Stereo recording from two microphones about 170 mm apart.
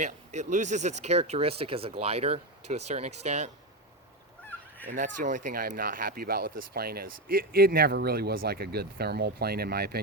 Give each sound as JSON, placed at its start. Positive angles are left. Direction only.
{"t": 0.0, "sound": "speech", "side_deg": -45}
{"t": 4.9, "sound": "speech", "side_deg": -50}